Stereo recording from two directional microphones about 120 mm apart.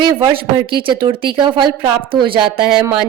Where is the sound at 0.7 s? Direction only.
45° right (ahead or behind).